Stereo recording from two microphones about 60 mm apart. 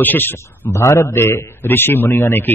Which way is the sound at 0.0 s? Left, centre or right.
Left.